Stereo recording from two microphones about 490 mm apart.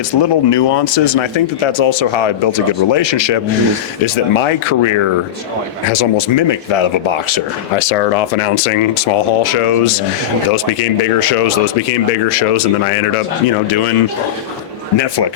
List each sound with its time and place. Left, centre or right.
0.1 s speech: left
4.0 s speech: left
8.4 s speech: left